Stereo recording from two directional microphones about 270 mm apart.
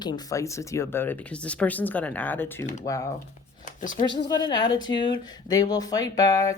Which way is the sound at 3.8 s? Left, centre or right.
Left.